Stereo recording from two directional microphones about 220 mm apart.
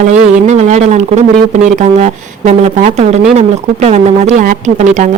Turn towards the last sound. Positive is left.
turn(degrees=-35)  # may be behind; listen again after turning